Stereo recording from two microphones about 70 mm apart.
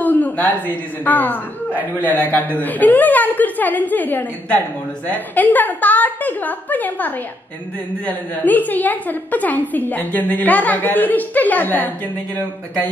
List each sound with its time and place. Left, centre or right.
0.0 s a woman's voice: left
1.7 s a man's voice: right
2.0 s a woman's voice: left